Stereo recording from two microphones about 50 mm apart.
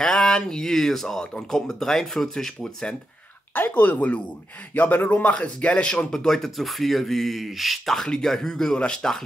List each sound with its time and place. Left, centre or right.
0.0 s speech: centre
3.5 s speech: left
5.3 s speech: left
6.1 s speech: centre